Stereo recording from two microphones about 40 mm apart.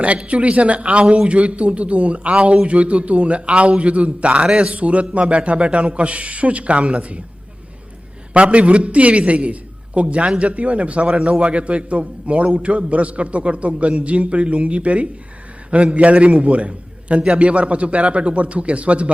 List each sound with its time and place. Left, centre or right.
0.0 s a man's voice: right
4.4 s a man's voice: centre
4.7 s a man's voice: right
8.3 s a man's voice: right